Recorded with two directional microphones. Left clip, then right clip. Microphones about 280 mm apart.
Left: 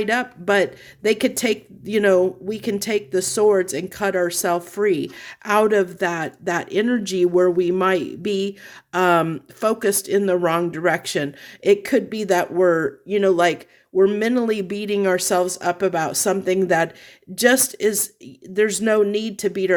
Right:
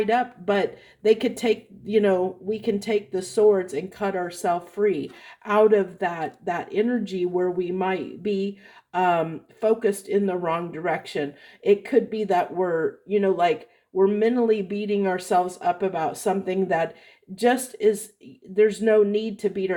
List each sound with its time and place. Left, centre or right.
0.1 s speech: left